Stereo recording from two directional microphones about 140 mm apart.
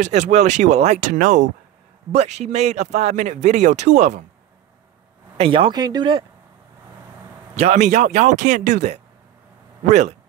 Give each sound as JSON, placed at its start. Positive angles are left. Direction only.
{"t": 0.0, "sound": "speech", "side_deg": -55}
{"t": 5.4, "sound": "speech", "side_deg": -40}
{"t": 5.7, "sound": "speech", "side_deg": -30}
{"t": 7.5, "sound": "speech", "side_deg": -50}